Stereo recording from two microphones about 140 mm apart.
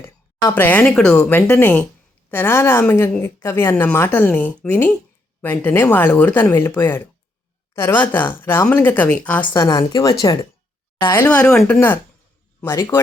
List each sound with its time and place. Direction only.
0.0 s speech: 15° left (ahead or behind)
9.6 s speech: 30° left (ahead or behind)